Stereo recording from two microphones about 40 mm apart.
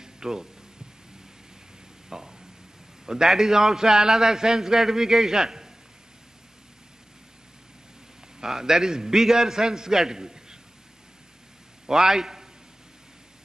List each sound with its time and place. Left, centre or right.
0.0 s music: centre
2.0 s a sound: centre
3.1 s a man's voice: centre
8.4 s a man's voice: centre
11.8 s a man's voice: centre